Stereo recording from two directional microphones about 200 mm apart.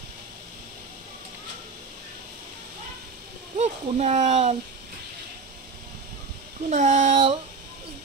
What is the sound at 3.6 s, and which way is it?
Speech, 35° right (ahead or behind).